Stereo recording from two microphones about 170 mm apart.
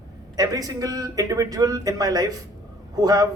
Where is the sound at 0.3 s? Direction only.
20° right (ahead or behind).